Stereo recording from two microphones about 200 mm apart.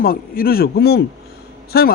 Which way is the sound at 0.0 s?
45° left (ahead or behind).